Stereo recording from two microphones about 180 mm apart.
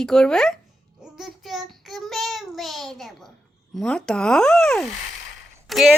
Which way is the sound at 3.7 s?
5° left (ahead or behind).